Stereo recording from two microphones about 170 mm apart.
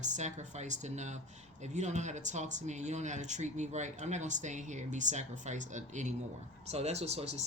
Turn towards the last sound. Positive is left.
turn(degrees=-40)  # may be behind; listen again after turning